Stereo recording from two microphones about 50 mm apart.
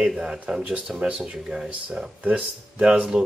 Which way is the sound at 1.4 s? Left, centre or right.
Centre.